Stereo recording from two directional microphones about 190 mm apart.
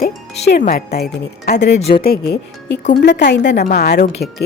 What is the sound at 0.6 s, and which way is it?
A woman's voice, 50° left (ahead or behind).